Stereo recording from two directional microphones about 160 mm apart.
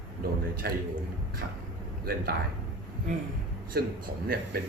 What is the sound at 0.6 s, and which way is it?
Speech, 75° right (ahead or behind).